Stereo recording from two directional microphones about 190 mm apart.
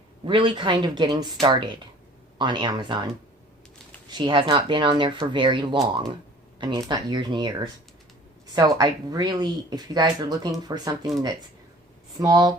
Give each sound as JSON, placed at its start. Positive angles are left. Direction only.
{"t": 0.3, "sound": "speech", "side_deg": -25}
{"t": 4.1, "sound": "speech", "side_deg": -25}
{"t": 8.8, "sound": "speech", "side_deg": -20}
{"t": 12.2, "sound": "speech", "side_deg": -20}